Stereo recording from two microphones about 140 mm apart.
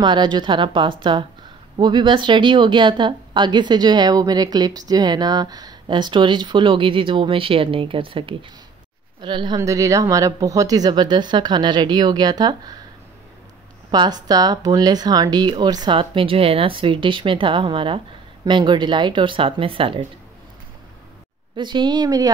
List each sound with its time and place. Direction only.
0.0 s a woman's voice: 30° right (ahead or behind)
9.6 s speech: 20° right (ahead or behind)
13.8 s a woman's voice: 30° right (ahead or behind)
21.5 s a woman's voice: 35° right (ahead or behind)